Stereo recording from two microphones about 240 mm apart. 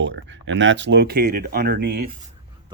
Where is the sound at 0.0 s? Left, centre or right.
Right.